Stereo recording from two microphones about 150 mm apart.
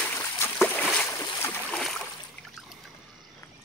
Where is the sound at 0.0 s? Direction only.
15° left (ahead or behind).